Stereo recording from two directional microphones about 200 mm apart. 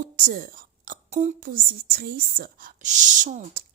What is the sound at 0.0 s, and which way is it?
Speech, 45° right (ahead or behind).